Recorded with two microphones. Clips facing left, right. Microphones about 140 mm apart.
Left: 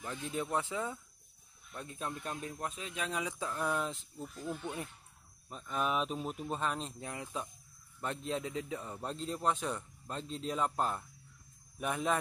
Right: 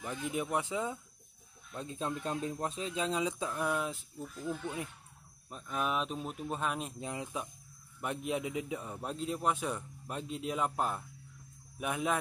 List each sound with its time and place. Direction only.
0.0 s a man's voice: 15° right (ahead or behind)
3.6 s speech: 5° right (ahead or behind)
5.5 s speech: centre (ahead or behind)
7.0 s a man's voice: 20° right (ahead or behind)